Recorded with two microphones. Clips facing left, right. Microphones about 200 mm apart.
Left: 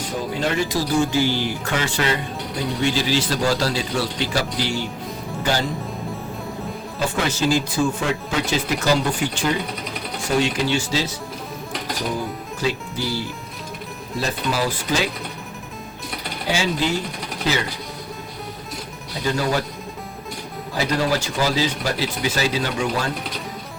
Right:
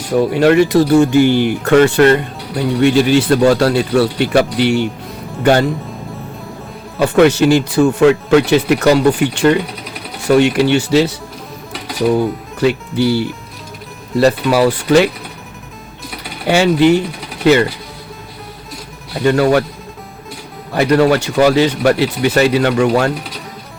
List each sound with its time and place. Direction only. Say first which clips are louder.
0.1 s speech: right 14 dB; 70° right (ahead or behind)
7.0 s speech: right 12 dB; 65° right (ahead or behind)
11.7 s music: right 7 dB; 5° right (ahead or behind)
12.1 s speech: right 11 dB; 65° right (ahead or behind)
16.5 s speech: right 12 dB; 65° right (ahead or behind)
19.1 s speech: right 10 dB; 65° right (ahead or behind)
20.7 s speech: right 10 dB; 65° right (ahead or behind)